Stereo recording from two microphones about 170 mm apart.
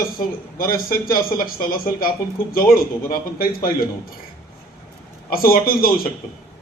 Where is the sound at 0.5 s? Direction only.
55° left (ahead or behind).